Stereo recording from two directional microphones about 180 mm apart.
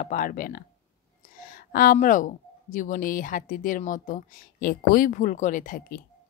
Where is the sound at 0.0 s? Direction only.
50° left (ahead or behind).